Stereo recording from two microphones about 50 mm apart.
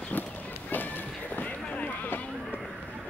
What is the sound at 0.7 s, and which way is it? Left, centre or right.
Music, left.